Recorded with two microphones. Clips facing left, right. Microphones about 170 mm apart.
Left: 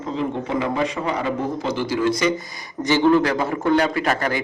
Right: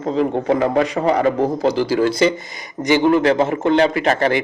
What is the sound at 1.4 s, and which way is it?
Speech, 35° right (ahead or behind).